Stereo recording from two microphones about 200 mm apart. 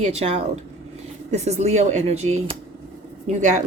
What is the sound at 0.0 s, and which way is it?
A woman's voice, 30° right (ahead or behind).